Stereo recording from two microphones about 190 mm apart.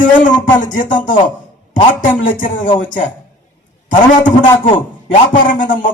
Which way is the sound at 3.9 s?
45° left (ahead or behind).